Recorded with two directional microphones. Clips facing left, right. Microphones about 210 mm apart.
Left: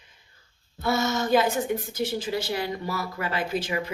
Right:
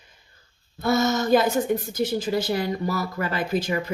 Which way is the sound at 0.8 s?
40° right (ahead or behind).